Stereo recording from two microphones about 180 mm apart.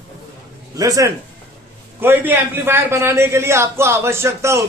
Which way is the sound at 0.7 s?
20° right (ahead or behind).